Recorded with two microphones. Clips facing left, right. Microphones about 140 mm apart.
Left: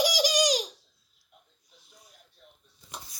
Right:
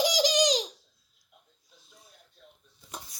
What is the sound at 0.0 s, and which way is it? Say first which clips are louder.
Baby laughter: right 1 dB; 20° right (ahead or behind).